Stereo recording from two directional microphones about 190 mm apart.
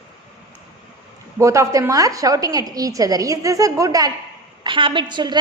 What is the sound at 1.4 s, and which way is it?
A woman's voice, 15° right (ahead or behind).